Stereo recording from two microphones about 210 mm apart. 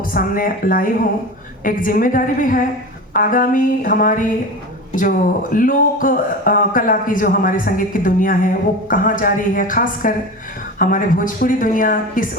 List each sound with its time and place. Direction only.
0.0 s speech: 40° left (ahead or behind)